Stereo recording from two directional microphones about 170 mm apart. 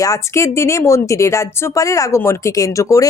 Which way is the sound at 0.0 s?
20° left (ahead or behind).